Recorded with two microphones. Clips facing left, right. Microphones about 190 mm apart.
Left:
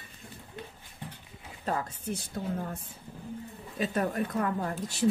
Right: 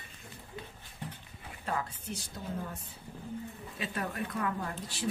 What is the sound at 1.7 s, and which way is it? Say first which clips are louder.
Speech: left 4 dB; 40° left (ahead or behind).